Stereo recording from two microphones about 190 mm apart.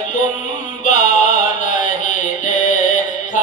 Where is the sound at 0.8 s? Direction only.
40° left (ahead or behind).